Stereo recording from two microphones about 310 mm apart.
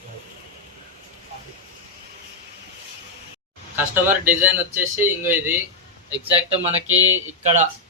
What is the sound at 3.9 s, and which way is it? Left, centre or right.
A man's voice, centre.